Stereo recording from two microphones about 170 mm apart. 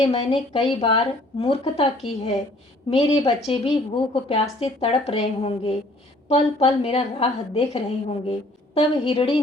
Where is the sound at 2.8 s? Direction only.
40° left (ahead or behind).